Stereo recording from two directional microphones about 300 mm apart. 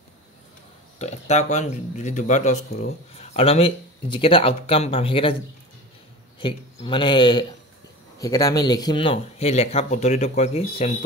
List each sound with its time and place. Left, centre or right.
0.9 s speech: left
6.4 s speech: centre